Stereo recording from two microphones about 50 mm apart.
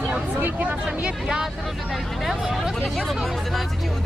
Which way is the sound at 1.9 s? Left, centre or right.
Centre.